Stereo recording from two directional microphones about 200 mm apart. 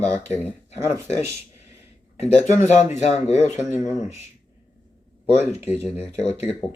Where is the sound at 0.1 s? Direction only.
15° right (ahead or behind).